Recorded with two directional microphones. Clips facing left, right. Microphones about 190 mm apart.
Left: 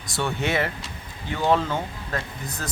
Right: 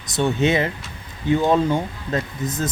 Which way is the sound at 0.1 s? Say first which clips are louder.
Right 6 dB; 20° right (ahead or behind).